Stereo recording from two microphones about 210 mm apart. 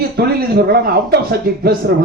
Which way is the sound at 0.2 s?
50° right (ahead or behind).